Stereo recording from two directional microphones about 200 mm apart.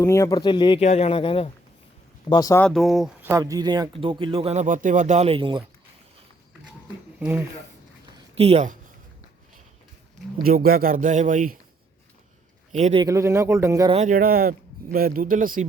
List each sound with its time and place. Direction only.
0.0 s speech: 15° left (ahead or behind)
2.3 s speech: 15° left (ahead or behind)
2.6 s speech: centre (ahead or behind); by 5.6 s 25° right (ahead or behind)
7.2 s a man's voice: 10° right (ahead or behind)
8.4 s a woman's voice: 35° right (ahead or behind)
10.4 s speech: 45° right (ahead or behind)
12.7 s a woman's voice: 30° right (ahead or behind)
13.1 s a man's voice: 15° right (ahead or behind)
13.9 s speech: 40° right (ahead or behind)